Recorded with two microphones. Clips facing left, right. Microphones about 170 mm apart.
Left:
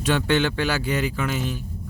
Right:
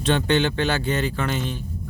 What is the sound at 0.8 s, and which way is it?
Speech, 10° left (ahead or behind).